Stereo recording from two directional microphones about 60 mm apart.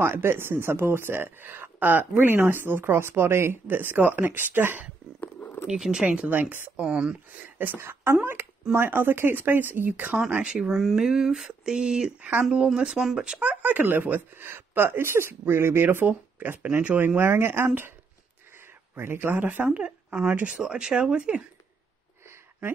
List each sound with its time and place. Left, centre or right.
0.0 s speech: right
5.8 s speech: centre
6.0 s speech: right
6.8 s speech: centre
7.3 s speech: right
10.4 s speech: centre
10.7 s speech: centre
12.2 s speech: right
12.6 s speech: centre
13.4 s speech: right
17.2 s speech: right
18.9 s speech: right; by 21.4 s centre